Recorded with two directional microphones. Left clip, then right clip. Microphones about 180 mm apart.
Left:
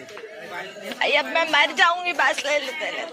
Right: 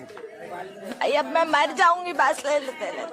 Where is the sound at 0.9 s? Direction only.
30° right (ahead or behind).